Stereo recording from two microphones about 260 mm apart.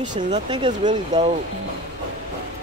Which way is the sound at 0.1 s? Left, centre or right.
Right.